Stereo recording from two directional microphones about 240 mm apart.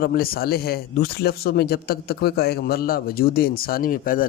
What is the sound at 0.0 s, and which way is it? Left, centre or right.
Speech, left.